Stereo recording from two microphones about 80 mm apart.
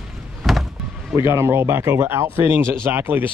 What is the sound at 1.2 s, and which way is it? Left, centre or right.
Speech, right.